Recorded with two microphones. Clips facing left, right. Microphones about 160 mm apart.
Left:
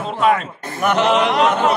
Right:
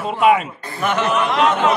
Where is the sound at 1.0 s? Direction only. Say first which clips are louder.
Left 4 dB; 80° left.